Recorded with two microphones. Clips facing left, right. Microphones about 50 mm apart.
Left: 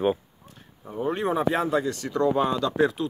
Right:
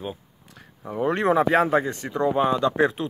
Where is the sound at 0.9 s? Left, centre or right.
Right.